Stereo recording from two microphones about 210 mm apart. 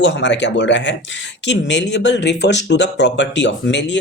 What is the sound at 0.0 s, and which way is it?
Speech, 60° left (ahead or behind).